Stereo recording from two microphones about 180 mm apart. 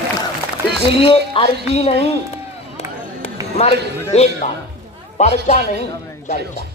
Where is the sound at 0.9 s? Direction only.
30° left (ahead or behind).